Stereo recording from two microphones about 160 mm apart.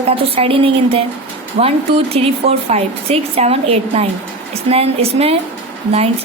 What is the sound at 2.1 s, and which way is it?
Speech, 40° right (ahead or behind).